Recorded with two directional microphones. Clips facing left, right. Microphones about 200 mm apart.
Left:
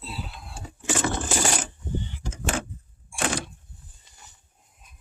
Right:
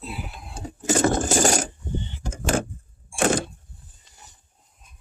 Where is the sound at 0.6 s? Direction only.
40° right (ahead or behind).